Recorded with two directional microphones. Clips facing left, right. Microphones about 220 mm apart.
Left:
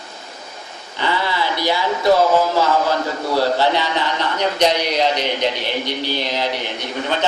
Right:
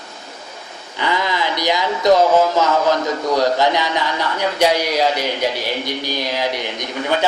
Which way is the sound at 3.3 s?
15° right (ahead or behind).